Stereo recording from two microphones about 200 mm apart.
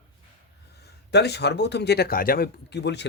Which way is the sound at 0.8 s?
55° left (ahead or behind).